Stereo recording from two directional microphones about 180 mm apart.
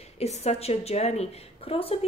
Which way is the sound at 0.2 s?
35° left (ahead or behind).